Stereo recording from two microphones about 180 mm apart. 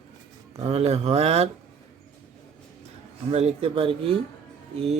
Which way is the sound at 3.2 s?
35° right (ahead or behind).